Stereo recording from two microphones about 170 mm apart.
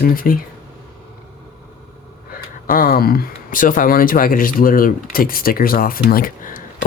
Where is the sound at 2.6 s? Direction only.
60° left (ahead or behind).